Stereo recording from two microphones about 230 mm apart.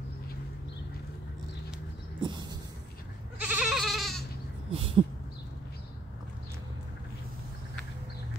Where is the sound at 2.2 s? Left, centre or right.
Centre.